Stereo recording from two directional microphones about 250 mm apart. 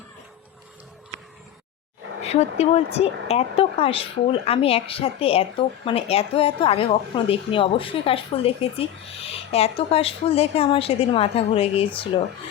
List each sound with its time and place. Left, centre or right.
2.2 s speech: left